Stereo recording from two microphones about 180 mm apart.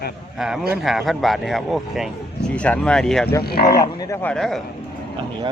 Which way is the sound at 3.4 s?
60° left (ahead or behind).